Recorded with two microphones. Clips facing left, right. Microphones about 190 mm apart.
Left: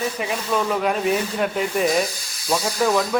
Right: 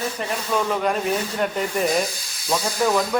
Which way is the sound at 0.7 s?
Centre (ahead or behind).